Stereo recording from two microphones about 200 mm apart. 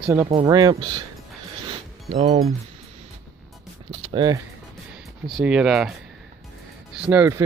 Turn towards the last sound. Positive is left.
turn(degrees=-10)  # may be behind; listen again after turning